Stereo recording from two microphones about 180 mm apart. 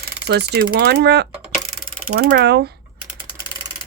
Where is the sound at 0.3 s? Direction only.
65° right (ahead or behind).